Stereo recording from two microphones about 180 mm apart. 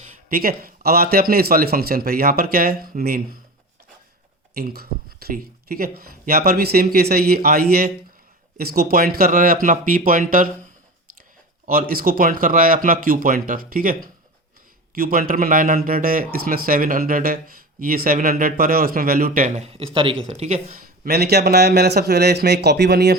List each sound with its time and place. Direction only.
0.3 s speech: 55° right (ahead or behind)
4.5 s speech: 60° right (ahead or behind)
11.6 s speech: 50° right (ahead or behind)
14.9 s speech: 55° right (ahead or behind)